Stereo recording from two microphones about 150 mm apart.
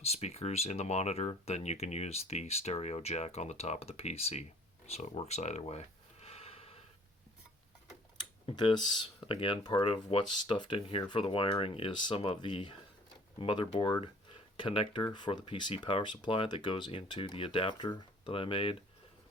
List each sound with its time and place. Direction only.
0.0 s speech: 45° left (ahead or behind)
4.9 s a sound: 45° left (ahead or behind)
8.4 s speech: 30° left (ahead or behind)